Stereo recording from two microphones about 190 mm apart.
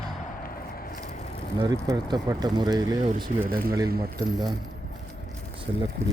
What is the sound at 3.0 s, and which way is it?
Speech, 40° right (ahead or behind).